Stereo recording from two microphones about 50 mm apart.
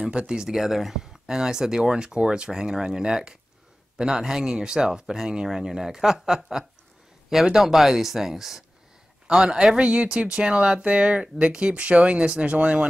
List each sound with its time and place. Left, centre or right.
0.0 s speech: centre